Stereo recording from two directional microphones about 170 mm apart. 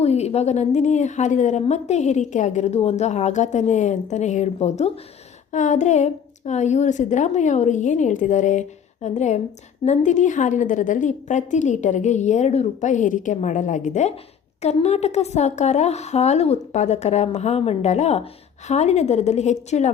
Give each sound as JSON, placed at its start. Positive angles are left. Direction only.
{"t": 0.0, "sound": "a woman's voice", "side_deg": 40}